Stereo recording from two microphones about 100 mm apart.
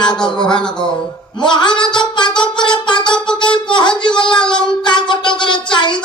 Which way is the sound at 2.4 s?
50° left (ahead or behind).